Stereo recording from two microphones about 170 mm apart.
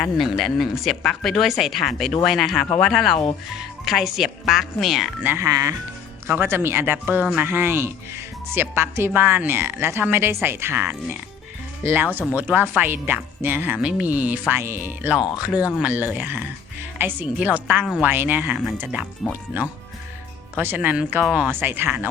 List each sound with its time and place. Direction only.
0.0 s speech: centre (ahead or behind)
5.3 s speech: 20° right (ahead or behind)
20.6 s speech: 10° right (ahead or behind)